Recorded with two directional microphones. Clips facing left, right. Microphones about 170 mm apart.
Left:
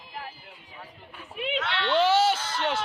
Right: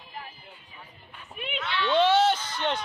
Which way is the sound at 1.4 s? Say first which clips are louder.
Left 6 dB; 30° left (ahead or behind).